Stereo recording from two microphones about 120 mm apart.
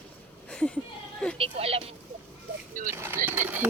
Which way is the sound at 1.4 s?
55° right (ahead or behind).